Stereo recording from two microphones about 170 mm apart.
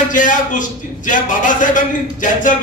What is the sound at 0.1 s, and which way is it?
A man's voice, 50° left (ahead or behind).